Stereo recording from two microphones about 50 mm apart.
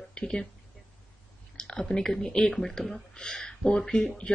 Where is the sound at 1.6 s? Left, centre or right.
Centre.